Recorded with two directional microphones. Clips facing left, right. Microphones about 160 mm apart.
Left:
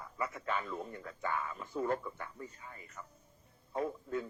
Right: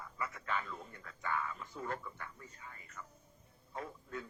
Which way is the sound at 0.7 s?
25° left (ahead or behind).